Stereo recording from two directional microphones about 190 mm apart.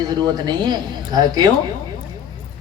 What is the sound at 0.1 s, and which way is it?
A man's voice, 20° right (ahead or behind).